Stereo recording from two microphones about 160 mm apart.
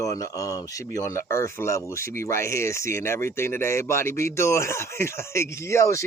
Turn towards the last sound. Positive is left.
turn(degrees=15)  # may be behind; listen again after turning